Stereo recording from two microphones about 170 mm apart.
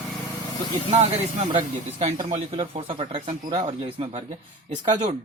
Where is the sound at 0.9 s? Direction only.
40° right (ahead or behind).